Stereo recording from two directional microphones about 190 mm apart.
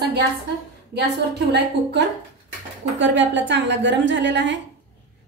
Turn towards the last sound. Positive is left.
turn(degrees=-70)  # may be behind; listen again after turning